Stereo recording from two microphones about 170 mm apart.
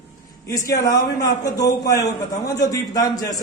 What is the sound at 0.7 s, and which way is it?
A man's voice, 20° left (ahead or behind).